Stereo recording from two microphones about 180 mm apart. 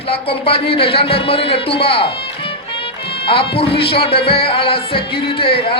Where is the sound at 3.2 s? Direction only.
30° left (ahead or behind).